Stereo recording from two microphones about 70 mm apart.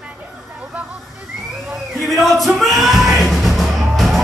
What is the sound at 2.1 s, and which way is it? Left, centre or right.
Music, centre.